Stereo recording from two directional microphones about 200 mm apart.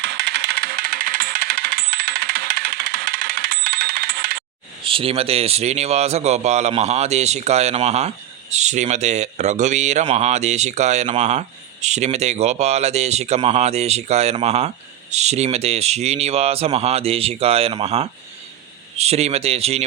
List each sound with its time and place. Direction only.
0.0 s coin: 55° right (ahead or behind)
4.8 s speech: 25° right (ahead or behind)